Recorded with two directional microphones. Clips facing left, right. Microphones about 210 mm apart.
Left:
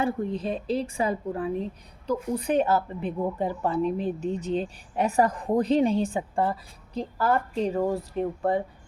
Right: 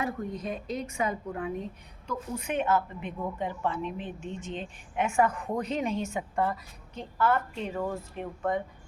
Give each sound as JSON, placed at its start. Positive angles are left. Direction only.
{"t": 0.0, "sound": "speech", "side_deg": 30}